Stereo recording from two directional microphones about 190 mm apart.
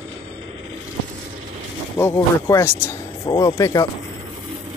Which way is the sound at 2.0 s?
10° left (ahead or behind).